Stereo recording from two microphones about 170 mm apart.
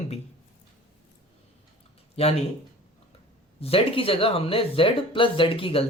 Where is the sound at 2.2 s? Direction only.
35° left (ahead or behind).